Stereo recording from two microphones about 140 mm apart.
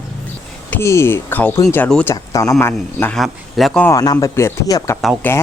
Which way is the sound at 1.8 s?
10° left (ahead or behind).